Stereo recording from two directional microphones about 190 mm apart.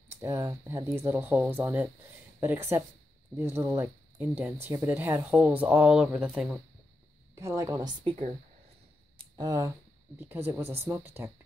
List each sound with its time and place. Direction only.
0.2 s speech: 15° right (ahead or behind)
7.3 s a woman's voice: 15° right (ahead or behind)
9.2 s a sound: 20° right (ahead or behind)
10.1 s speech: 10° right (ahead or behind)